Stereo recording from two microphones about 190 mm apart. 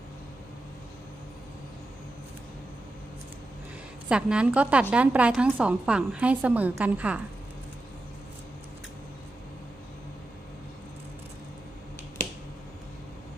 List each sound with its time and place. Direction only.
4.1 s a woman's voice: 5° right (ahead or behind)